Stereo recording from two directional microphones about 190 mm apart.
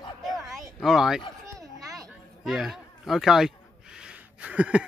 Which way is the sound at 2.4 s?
Centre (ahead or behind).